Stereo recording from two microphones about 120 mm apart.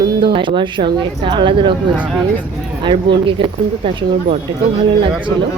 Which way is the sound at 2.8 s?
40° right (ahead or behind).